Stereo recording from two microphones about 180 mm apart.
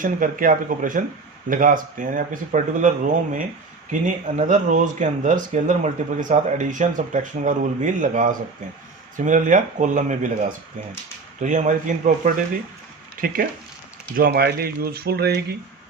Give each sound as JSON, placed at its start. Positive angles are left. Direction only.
{"t": 0.0, "sound": "speech", "side_deg": -50}
{"t": 11.4, "sound": "speech", "side_deg": -45}